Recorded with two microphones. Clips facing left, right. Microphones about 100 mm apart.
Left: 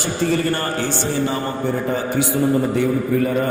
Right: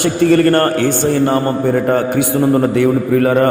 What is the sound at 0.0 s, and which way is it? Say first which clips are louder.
A man's voice: right 9 dB; 60° right (ahead or behind).